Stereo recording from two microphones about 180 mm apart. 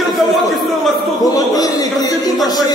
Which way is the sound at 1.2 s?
20° left (ahead or behind).